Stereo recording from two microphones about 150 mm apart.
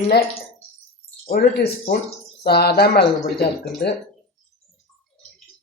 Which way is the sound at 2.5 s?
90° left.